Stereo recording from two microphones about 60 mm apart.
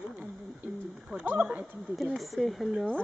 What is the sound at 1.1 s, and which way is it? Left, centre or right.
Speech, centre.